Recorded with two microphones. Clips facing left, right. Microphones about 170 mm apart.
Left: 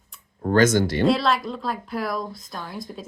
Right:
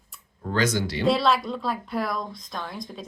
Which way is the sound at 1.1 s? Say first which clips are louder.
Left 1 dB; centre (ahead or behind).